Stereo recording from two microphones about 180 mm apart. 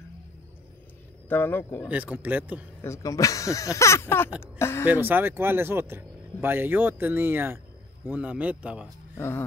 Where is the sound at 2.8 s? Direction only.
15° left (ahead or behind).